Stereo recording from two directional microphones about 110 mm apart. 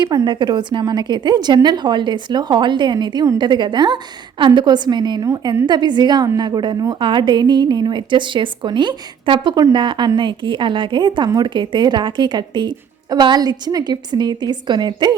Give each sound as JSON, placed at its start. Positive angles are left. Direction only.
{"t": 0.1, "sound": "a woman's voice", "side_deg": -40}